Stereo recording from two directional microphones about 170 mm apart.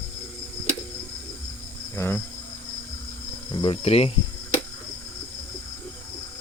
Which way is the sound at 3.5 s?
30° left (ahead or behind).